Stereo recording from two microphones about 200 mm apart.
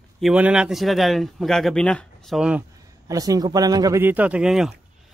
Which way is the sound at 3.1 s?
15° right (ahead or behind).